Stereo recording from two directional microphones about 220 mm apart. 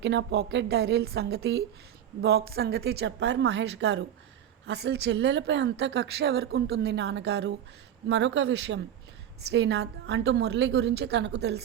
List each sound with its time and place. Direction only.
0.0 s a woman's voice: 55° right (ahead or behind)